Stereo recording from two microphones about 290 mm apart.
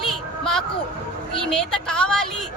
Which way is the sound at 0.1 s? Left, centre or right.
Centre.